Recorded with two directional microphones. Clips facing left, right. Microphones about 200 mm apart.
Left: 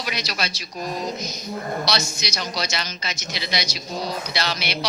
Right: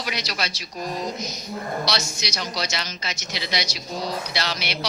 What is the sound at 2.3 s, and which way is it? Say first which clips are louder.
Speech: left 1 dB; 50° left (ahead or behind).